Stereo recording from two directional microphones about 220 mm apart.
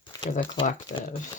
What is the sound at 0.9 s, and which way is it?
Speech, 15° left (ahead or behind).